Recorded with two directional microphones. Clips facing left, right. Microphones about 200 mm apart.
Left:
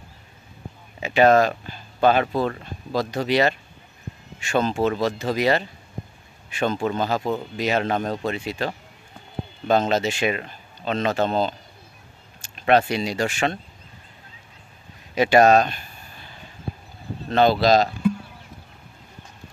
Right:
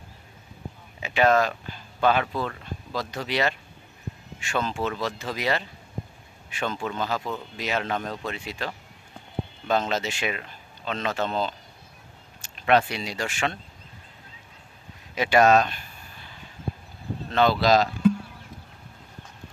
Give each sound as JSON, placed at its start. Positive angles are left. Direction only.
{"t": 1.0, "sound": "speech", "side_deg": 40}
{"t": 4.4, "sound": "speech", "side_deg": 40}
{"t": 6.6, "sound": "speech", "side_deg": 40}
{"t": 12.6, "sound": "speech", "side_deg": 40}
{"t": 15.1, "sound": "speech", "side_deg": 40}
{"t": 17.3, "sound": "speech", "side_deg": 35}